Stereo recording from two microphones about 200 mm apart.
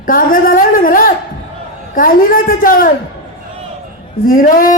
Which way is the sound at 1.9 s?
45° left (ahead or behind).